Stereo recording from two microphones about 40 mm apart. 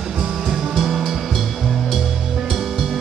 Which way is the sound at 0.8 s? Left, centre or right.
Centre.